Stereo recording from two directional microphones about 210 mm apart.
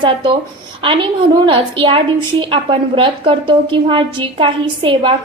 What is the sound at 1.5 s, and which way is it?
A woman's voice, 25° right (ahead or behind).